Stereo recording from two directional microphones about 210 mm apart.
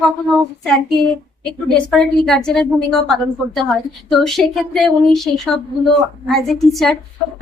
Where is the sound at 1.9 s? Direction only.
Centre (ahead or behind).